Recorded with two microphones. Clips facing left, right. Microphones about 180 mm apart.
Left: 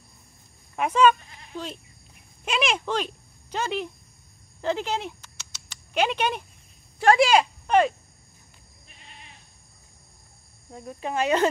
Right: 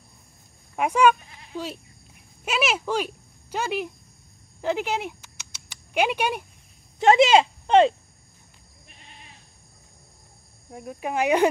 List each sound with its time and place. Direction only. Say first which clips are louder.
0.7 s speech: even; 10° right (ahead or behind)
4.6 s a sound: right 1 dB; 10° right (ahead or behind)
7.0 s speech: right 2 dB; 20° right (ahead or behind)
10.7 s speech: right 1 dB; 10° right (ahead or behind)